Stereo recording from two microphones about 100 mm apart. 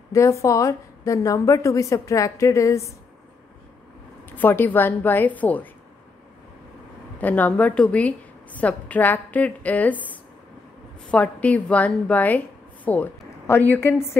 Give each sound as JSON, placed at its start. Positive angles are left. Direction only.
{"t": 0.1, "sound": "a woman's voice", "side_deg": 30}
{"t": 4.3, "sound": "a woman's voice", "side_deg": 20}
{"t": 7.2, "sound": "a woman's voice", "side_deg": 15}